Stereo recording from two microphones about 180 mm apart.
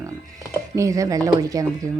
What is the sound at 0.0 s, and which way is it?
Speech, 20° right (ahead or behind).